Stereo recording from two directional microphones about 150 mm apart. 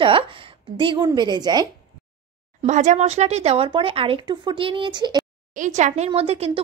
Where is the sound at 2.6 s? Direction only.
55° right (ahead or behind); by 5.2 s 30° right (ahead or behind).